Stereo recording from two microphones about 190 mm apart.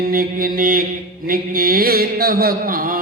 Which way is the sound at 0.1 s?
50° right (ahead or behind).